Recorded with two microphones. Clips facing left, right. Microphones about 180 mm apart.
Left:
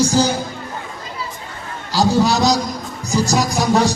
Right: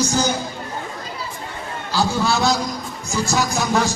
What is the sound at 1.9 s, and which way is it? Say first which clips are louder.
Speech: left 5 dB; 40° left (ahead or behind).